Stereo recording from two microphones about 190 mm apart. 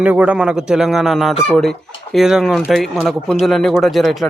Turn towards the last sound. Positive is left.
turn(degrees=0)  # may be behind; listen again after turning